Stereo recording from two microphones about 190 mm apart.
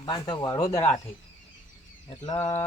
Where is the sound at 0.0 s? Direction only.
25° left (ahead or behind).